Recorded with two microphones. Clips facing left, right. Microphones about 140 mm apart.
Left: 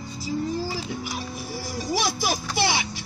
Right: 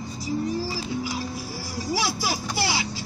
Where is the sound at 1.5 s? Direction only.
20° left (ahead or behind).